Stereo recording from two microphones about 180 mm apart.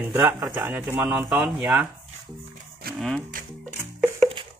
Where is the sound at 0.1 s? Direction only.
15° right (ahead or behind).